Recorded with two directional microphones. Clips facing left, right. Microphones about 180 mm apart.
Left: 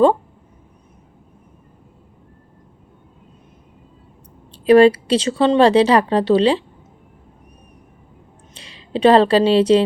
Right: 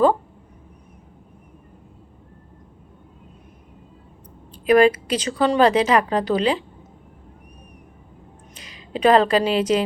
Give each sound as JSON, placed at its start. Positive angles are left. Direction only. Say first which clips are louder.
{"t": 4.5, "sound": "speech", "louder": "left 5 dB", "side_deg": 30}
{"t": 8.5, "sound": "a woman's voice", "louder": "left 5 dB", "side_deg": 30}